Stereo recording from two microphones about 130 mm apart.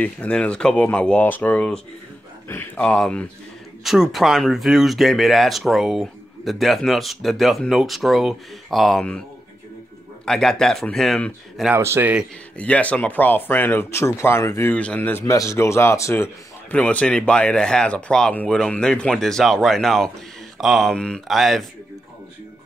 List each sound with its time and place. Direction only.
0.0 s speech: 10° left (ahead or behind)
10.2 s speech: 5° left (ahead or behind)
11.7 s a man's voice: 20° right (ahead or behind)
12.5 s speech: 10° left (ahead or behind)
16.7 s speech: 10° left (ahead or behind)